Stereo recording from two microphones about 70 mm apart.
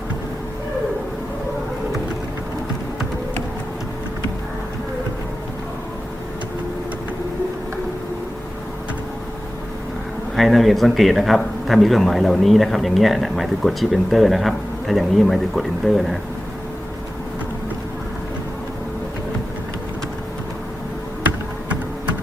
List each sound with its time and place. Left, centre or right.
10.3 s a man's voice: centre